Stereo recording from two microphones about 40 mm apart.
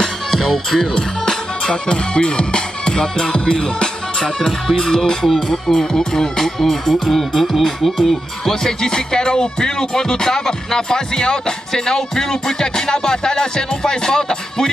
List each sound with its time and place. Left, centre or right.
0.0 s music: centre